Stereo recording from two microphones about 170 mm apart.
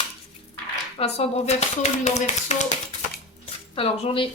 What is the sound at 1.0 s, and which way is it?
Speech, 40° left (ahead or behind).